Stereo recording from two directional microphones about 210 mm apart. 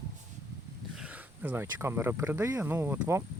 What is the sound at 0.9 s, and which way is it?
Speech, 5° right (ahead or behind).